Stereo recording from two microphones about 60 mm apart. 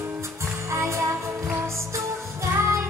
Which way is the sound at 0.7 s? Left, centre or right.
Right.